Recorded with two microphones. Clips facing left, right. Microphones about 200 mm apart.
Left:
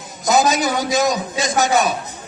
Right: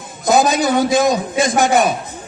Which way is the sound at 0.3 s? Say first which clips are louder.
Right 3 dB; 55° right (ahead or behind).